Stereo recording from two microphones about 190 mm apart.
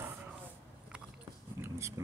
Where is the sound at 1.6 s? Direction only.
15° right (ahead or behind).